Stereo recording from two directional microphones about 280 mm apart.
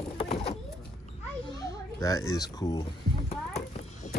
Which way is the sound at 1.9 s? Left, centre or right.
Centre.